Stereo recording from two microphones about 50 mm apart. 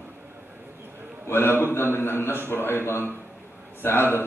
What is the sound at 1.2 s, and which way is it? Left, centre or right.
A man's voice, left.